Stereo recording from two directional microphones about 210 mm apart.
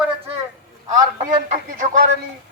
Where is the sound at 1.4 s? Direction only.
35° right (ahead or behind).